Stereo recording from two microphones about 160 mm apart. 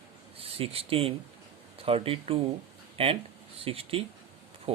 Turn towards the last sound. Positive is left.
turn(degrees=-35)  # may be behind; listen again after turning